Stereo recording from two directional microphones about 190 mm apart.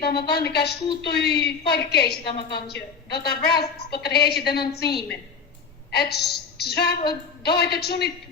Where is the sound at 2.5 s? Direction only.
60° left (ahead or behind).